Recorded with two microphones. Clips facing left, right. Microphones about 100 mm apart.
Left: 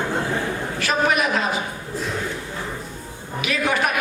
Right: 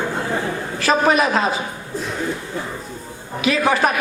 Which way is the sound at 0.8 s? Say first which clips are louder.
Right 5 dB; 30° right (ahead or behind).